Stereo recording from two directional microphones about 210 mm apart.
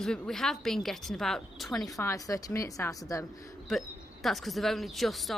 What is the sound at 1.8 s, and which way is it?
A woman's voice, 15° left (ahead or behind).